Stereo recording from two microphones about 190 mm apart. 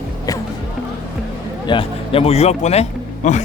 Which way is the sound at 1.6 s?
25° left (ahead or behind).